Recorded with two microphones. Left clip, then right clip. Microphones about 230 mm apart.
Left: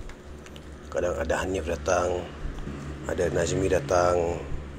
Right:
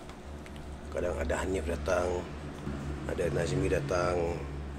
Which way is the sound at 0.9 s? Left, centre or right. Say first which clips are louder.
Left 6 dB; centre.